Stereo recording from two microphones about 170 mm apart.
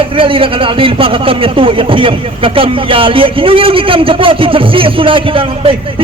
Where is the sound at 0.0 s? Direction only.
30° right (ahead or behind).